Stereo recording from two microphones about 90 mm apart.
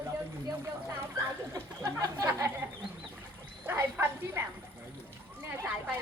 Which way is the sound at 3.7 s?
25° right (ahead or behind).